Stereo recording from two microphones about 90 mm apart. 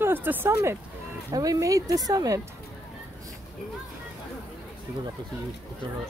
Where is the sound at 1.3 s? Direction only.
40° right (ahead or behind).